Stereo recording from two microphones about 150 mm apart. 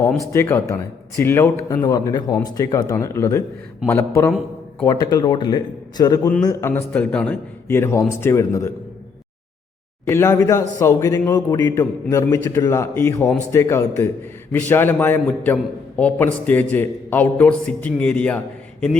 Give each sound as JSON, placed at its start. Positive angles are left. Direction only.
{"t": 0.2, "sound": "a man's voice", "side_deg": 20}
{"t": 1.8, "sound": "a man's voice", "side_deg": 30}
{"t": 10.1, "sound": "a man's voice", "side_deg": 15}